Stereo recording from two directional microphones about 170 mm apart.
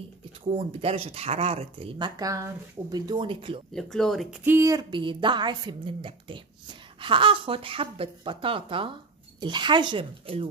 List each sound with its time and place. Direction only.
0.5 s a woman's voice: 35° right (ahead or behind)
3.7 s speech: centre (ahead or behind)
4.5 s a woman's voice: 20° right (ahead or behind); by 10.5 s 35° right (ahead or behind)